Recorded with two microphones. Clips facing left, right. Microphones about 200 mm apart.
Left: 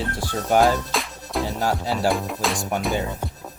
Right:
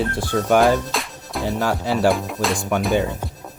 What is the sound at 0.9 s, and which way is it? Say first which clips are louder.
Music: left 1 dB; centre (ahead or behind).